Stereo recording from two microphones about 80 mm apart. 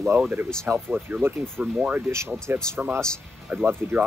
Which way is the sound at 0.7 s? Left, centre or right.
Right.